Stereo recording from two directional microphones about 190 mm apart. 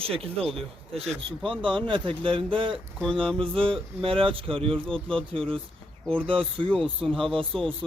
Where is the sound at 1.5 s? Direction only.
25° right (ahead or behind).